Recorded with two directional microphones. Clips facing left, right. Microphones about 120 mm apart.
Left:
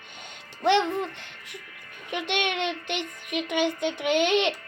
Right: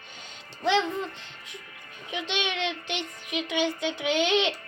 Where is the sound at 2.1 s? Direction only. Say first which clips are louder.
Left 3 dB; 60° left (ahead or behind).